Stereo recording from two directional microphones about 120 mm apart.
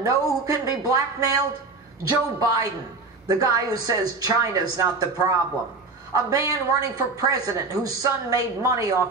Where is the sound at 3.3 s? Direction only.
30° right (ahead or behind).